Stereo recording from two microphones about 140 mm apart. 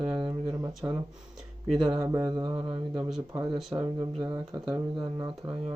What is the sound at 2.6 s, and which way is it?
Speech, 40° right (ahead or behind).